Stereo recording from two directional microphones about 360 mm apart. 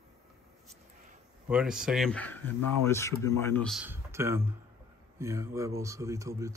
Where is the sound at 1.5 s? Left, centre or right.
Centre.